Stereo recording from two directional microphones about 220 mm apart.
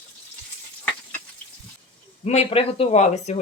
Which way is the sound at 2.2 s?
30° left (ahead or behind).